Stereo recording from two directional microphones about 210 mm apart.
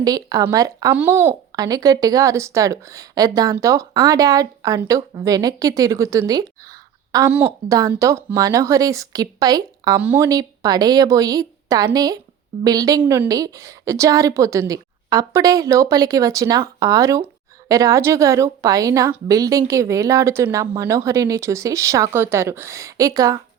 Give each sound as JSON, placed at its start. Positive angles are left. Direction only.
{"t": 0.0, "sound": "speech", "side_deg": -15}